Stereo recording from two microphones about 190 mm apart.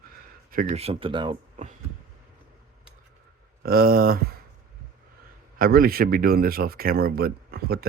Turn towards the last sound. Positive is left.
turn(degrees=-55)  # may be behind; listen again after turning